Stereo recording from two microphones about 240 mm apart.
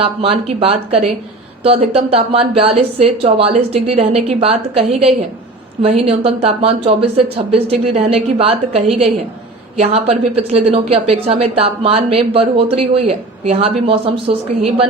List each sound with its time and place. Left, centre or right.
0.0 s a woman's voice: right